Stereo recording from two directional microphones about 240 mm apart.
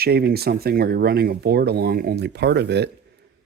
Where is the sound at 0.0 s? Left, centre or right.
Right.